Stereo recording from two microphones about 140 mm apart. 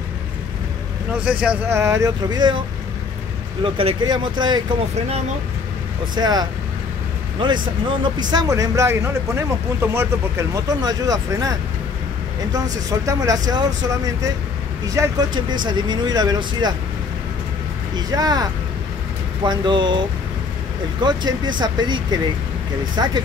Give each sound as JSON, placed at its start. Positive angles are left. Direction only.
{"t": 1.1, "sound": "speech", "side_deg": -5}
{"t": 1.7, "sound": "speech", "side_deg": -20}
{"t": 3.6, "sound": "speech", "side_deg": -40}
{"t": 6.1, "sound": "speech", "side_deg": -30}
{"t": 13.0, "sound": "speech", "side_deg": -25}
{"t": 17.9, "sound": "speech", "side_deg": -30}
{"t": 21.0, "sound": "speech", "side_deg": -30}